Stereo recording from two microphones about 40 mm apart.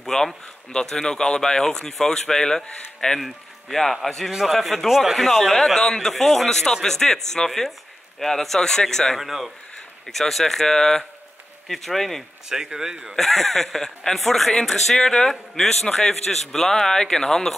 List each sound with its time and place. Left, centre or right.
0.0 s speech: centre
3.2 s speech: centre
4.3 s speech: centre
5.8 s speech: centre
9.2 s speech: centre
12.4 s speech: centre
13.1 s speech: centre